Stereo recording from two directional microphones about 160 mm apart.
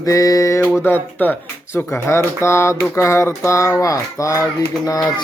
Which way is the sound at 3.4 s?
20° left (ahead or behind).